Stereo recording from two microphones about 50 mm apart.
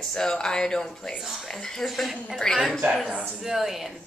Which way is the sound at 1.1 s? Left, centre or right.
Centre.